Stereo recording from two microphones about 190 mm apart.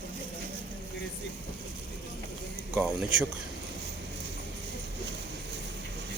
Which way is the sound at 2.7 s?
5° right (ahead or behind).